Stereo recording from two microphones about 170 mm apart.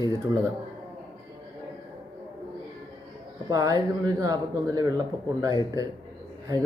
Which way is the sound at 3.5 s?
20° right (ahead or behind).